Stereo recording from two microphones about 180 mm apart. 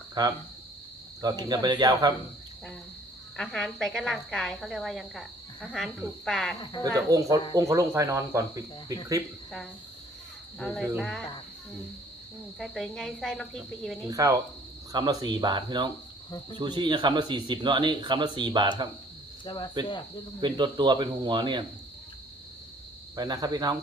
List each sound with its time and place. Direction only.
0.1 s speech: 20° right (ahead or behind)
3.3 s a woman's voice: centre (ahead or behind)
6.9 s speech: 20° right (ahead or behind)
7.5 s cricket: 15° right (ahead or behind)
10.6 s a woman's voice: 5° right (ahead or behind)
12.5 s a woman's voice: centre (ahead or behind)
14.1 s speech: 20° right (ahead or behind)
20.4 s speech: 25° right (ahead or behind)
23.1 s speech: 20° right (ahead or behind)